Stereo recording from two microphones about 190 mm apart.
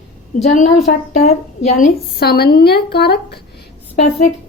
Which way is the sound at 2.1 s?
55° left (ahead or behind).